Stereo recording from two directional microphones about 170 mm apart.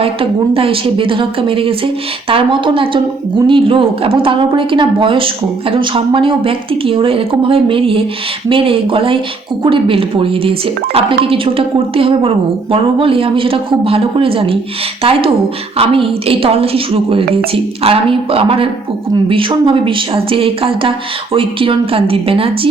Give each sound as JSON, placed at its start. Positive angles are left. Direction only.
{"t": 0.0, "sound": "speech", "side_deg": -35}